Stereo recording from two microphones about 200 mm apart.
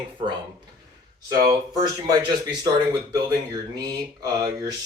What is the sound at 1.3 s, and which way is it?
Speech, 20° right (ahead or behind).